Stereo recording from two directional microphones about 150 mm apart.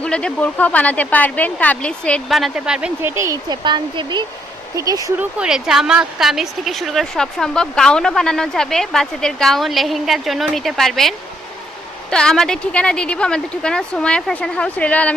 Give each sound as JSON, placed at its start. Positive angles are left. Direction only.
{"t": 0.0, "sound": "speech", "side_deg": 5}
{"t": 3.0, "sound": "speech", "side_deg": -20}
{"t": 5.2, "sound": "speech", "side_deg": -5}
{"t": 12.1, "sound": "speech", "side_deg": 5}